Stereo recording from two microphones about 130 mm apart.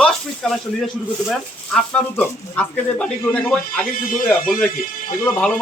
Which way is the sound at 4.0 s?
90° left.